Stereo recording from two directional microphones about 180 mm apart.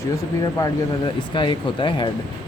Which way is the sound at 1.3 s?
30° left (ahead or behind).